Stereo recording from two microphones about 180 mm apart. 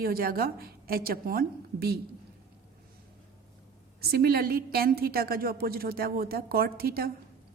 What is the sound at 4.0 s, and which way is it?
Speech, 60° right (ahead or behind).